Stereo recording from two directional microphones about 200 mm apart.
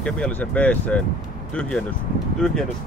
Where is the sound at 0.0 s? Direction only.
5° left (ahead or behind).